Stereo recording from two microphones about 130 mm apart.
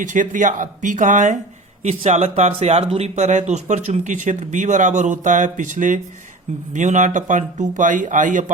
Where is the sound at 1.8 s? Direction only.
55° right (ahead or behind).